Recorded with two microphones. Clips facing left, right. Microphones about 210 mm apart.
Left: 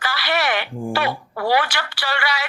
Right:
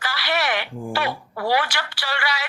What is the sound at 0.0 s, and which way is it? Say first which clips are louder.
Speech: left 2 dB; 65° left (ahead or behind).